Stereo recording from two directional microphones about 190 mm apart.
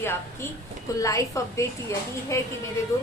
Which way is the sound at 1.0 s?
15° left (ahead or behind).